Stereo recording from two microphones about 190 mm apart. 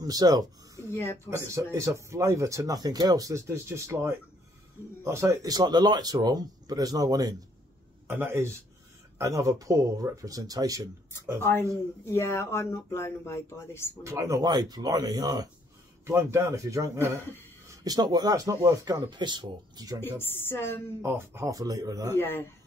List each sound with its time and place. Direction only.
0.0 s speech: 20° right (ahead or behind)
12.1 s speech: 10° left (ahead or behind)
14.0 s speech: 15° right (ahead or behind)
20.0 s speech: 10° left (ahead or behind)
21.0 s speech: 15° right (ahead or behind)
22.1 s speech: 10° left (ahead or behind)